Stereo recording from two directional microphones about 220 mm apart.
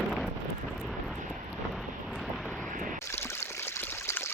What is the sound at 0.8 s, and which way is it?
Vehicle, centre (ahead or behind).